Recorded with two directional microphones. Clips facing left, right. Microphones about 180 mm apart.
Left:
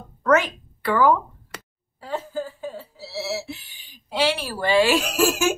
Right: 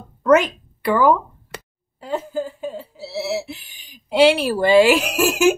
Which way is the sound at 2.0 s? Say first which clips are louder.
Right 4 dB; 15° right (ahead or behind).